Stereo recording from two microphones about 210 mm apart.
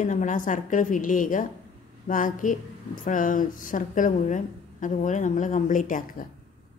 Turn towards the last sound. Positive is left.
turn(degrees=40)  # may be behind; listen again after turning